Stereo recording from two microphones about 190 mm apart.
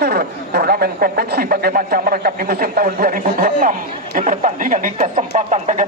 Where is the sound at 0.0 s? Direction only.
55° right (ahead or behind).